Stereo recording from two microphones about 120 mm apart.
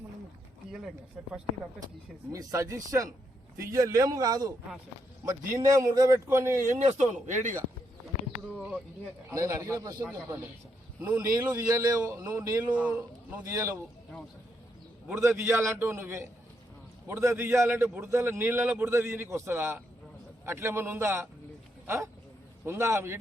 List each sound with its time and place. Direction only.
0.6 s a sound: 5° right (ahead or behind)
2.3 s a man's voice: 30° right (ahead or behind)
6.7 s a man's voice: 75° right (ahead or behind)
8.3 s a sound: 5° right (ahead or behind)
9.3 s a man's voice: 30° right (ahead or behind)
11.5 s a man's voice: 30° right (ahead or behind)
12.6 s speech: 10° right (ahead or behind)
12.9 s a man's voice: 25° right (ahead or behind)
15.1 s a man's voice: 20° right (ahead or behind)